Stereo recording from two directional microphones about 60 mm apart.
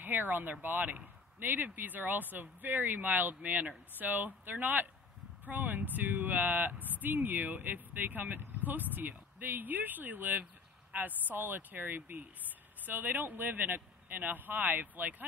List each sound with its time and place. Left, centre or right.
0.0 s speech: right